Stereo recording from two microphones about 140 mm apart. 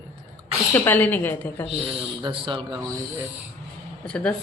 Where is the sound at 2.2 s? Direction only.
35° right (ahead or behind).